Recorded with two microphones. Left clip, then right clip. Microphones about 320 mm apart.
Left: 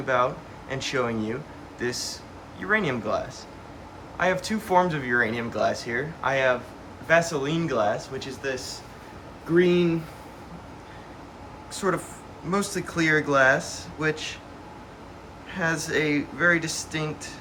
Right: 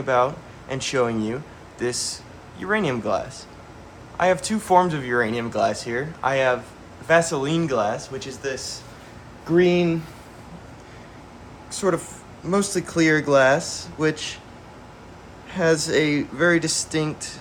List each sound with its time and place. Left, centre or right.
0.0 s speech: centre
11.7 s speech: centre
15.5 s speech: centre